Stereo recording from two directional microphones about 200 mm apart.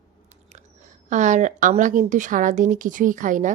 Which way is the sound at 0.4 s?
35° right (ahead or behind).